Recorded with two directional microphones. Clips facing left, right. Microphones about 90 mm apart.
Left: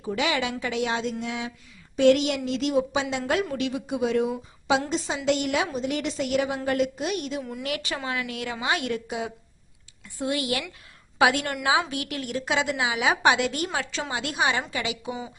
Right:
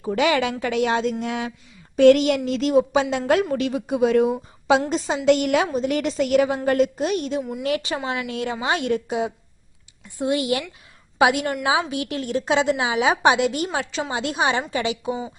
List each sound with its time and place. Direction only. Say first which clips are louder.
0.0 s a woman's voice: right 6 dB; 50° right (ahead or behind)
1.2 s a sound: right 5 dB; 55° right (ahead or behind)
2.0 s a woman's voice: right 5 dB; 50° right (ahead or behind); by 15.3 s 30° right (ahead or behind)